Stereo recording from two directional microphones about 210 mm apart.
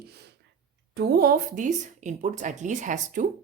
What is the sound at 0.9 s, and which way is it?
A woman's voice, 45° right (ahead or behind).